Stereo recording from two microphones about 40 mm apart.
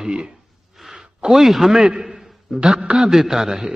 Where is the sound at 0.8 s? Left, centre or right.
Centre.